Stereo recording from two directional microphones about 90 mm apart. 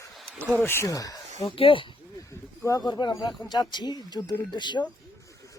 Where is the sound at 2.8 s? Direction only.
50° left (ahead or behind).